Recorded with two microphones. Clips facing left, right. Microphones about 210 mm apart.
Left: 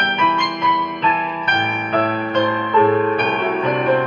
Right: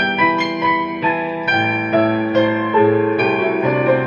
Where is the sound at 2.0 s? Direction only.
5° right (ahead or behind).